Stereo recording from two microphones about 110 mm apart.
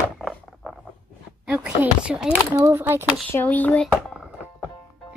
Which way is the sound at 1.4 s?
10° right (ahead or behind).